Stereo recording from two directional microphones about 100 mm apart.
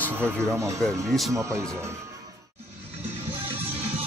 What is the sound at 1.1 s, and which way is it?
Speech, centre (ahead or behind).